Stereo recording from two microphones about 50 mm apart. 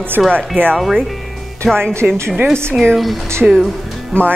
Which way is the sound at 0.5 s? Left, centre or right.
Right.